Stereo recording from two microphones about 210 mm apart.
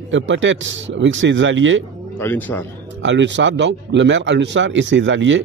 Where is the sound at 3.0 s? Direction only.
60° right (ahead or behind).